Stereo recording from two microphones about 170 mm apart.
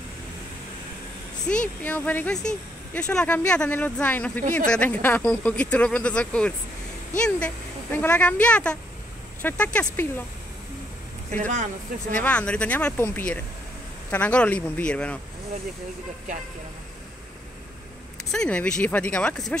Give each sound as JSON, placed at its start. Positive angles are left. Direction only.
{"t": 1.5, "sound": "speech", "side_deg": 5}
{"t": 11.3, "sound": "speech", "side_deg": -45}
{"t": 12.1, "sound": "speech", "side_deg": 5}
{"t": 18.3, "sound": "speech", "side_deg": 5}